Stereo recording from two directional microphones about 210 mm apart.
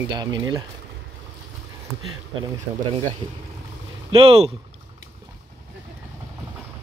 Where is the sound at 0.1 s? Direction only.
20° right (ahead or behind).